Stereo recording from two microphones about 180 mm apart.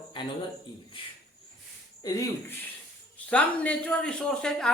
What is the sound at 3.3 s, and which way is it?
Speech, 5° left (ahead or behind).